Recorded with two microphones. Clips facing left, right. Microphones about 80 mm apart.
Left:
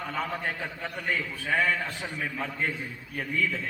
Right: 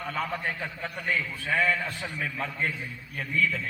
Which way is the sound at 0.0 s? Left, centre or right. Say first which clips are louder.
Even; centre.